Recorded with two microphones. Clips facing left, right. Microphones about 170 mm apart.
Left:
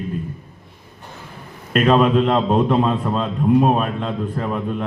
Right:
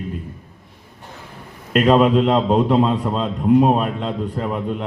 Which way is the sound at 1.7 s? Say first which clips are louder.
Right 1 dB; 15° right (ahead or behind).